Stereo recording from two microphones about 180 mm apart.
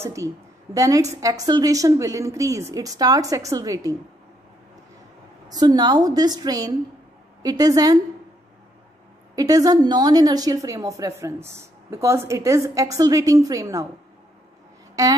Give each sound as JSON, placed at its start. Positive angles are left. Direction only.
{"t": 0.0, "sound": "a woman's voice", "side_deg": -15}
{"t": 5.5, "sound": "a woman's voice", "side_deg": -20}
{"t": 9.3, "sound": "a woman's voice", "side_deg": -20}
{"t": 15.0, "sound": "a woman's voice", "side_deg": -20}